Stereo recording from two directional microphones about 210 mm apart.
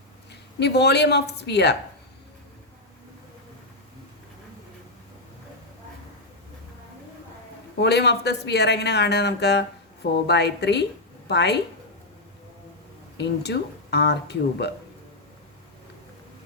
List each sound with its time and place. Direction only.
0.6 s speech: 55° left (ahead or behind)
7.8 s speech: 50° left (ahead or behind)
13.1 s speech: 55° left (ahead or behind)